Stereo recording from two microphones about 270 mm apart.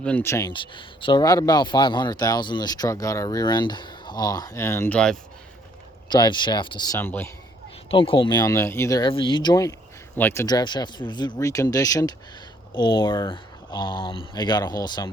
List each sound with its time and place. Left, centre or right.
0.0 s speech: centre
6.1 s speech: centre
7.9 s speech: centre